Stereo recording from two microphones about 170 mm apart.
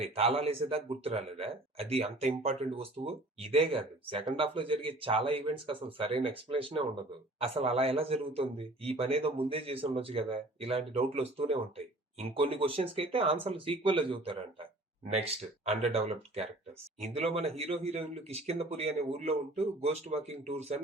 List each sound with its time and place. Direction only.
0.0 s speech: 35° right (ahead or behind)